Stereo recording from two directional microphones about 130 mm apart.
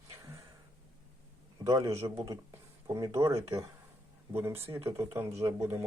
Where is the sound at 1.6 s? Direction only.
25° right (ahead or behind).